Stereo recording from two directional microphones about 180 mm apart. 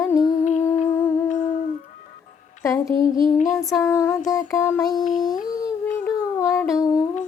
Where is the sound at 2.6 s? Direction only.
15° left (ahead or behind).